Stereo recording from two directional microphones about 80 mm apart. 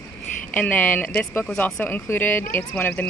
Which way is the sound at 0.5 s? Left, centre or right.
Centre.